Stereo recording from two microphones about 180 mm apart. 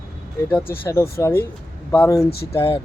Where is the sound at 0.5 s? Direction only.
15° left (ahead or behind).